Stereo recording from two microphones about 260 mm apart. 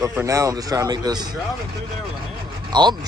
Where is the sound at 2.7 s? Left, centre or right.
Centre.